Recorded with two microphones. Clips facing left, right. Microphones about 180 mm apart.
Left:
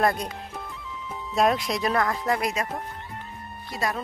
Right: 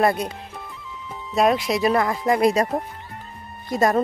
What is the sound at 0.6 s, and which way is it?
Music, centre (ahead or behind).